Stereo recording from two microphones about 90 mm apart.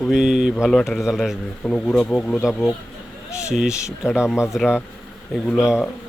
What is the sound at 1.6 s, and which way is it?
Speech, 10° left (ahead or behind).